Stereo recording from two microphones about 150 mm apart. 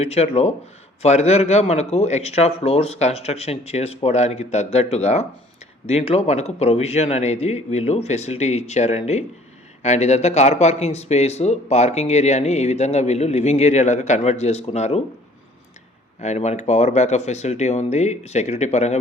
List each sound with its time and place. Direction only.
0.0 s speech: 45° left (ahead or behind)
16.2 s speech: 50° left (ahead or behind)